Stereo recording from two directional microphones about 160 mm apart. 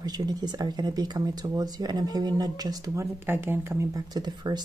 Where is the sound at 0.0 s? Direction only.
25° right (ahead or behind).